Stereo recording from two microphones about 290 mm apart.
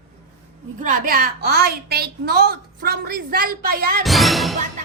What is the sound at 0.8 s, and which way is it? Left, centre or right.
A woman's voice, right.